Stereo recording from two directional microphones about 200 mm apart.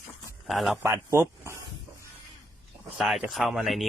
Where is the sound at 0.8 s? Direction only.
15° right (ahead or behind).